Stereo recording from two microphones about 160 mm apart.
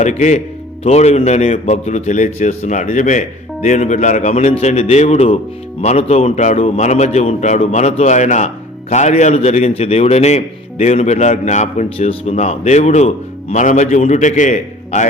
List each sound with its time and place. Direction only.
0.0 s a man's voice: 45° left (ahead or behind)